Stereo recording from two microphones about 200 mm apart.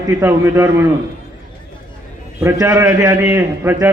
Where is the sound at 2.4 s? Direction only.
15° right (ahead or behind).